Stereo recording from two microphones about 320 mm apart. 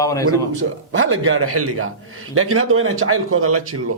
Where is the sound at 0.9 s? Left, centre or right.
Right.